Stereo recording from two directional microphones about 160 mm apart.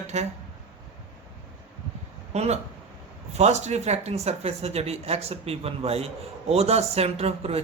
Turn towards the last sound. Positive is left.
turn(degrees=-40)  # may be behind; listen again after turning